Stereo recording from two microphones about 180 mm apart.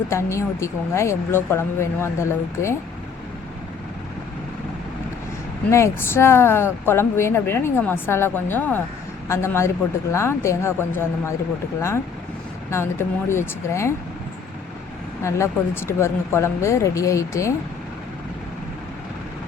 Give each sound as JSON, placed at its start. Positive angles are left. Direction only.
{"t": 0.1, "sound": "speech", "side_deg": 15}
{"t": 5.7, "sound": "speech", "side_deg": 15}
{"t": 12.7, "sound": "speech", "side_deg": 15}
{"t": 15.2, "sound": "speech", "side_deg": 15}